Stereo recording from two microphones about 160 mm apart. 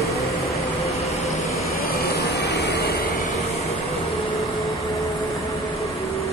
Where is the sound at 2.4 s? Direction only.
90° left.